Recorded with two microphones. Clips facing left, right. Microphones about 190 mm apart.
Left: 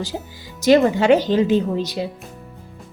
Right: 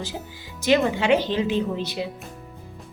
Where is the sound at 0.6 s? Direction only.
40° left (ahead or behind).